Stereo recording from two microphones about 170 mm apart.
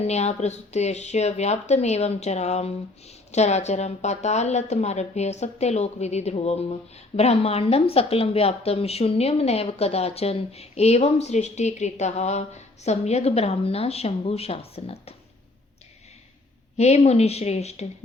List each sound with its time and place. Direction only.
0.0 s a woman's voice: 40° left (ahead or behind)
16.7 s a woman's voice: 40° left (ahead or behind)